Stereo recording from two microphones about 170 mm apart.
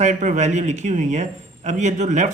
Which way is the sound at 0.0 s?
45° right (ahead or behind).